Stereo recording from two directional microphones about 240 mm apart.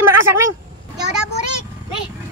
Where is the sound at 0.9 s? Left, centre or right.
Centre.